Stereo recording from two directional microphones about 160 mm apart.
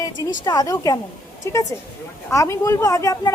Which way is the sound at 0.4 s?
25° left (ahead or behind).